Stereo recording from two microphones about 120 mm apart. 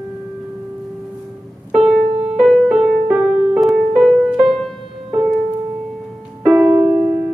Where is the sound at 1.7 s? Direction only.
Centre (ahead or behind).